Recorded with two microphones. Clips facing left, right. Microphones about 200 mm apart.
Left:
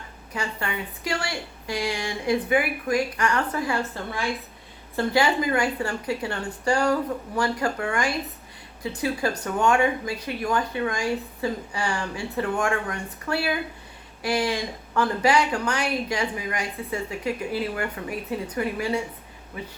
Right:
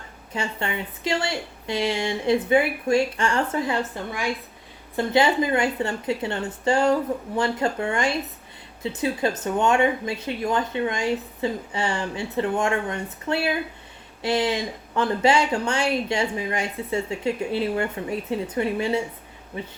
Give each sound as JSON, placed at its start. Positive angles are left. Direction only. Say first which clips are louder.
{"t": 0.3, "sound": "speech", "louder": "right 2 dB", "side_deg": -25}